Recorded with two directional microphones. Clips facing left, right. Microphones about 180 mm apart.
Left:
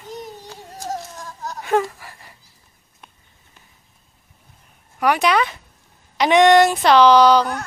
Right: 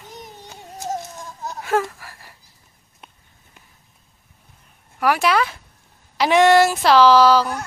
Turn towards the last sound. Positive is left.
turn(degrees=-5)  # may be behind; listen again after turning